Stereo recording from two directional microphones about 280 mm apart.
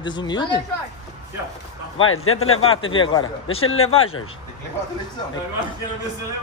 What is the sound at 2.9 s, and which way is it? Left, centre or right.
Speech, centre.